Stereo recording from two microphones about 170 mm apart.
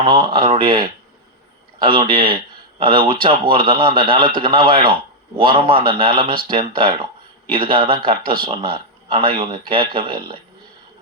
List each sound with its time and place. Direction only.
0.0 s speech: 25° right (ahead or behind)